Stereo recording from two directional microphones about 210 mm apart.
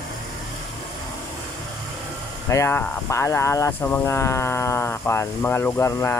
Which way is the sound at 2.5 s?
10° left (ahead or behind).